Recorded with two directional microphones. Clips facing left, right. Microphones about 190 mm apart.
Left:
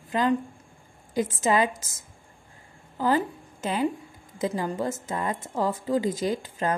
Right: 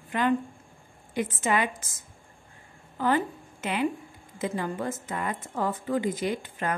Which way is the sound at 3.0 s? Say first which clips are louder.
Left 1 dB; 35° left (ahead or behind).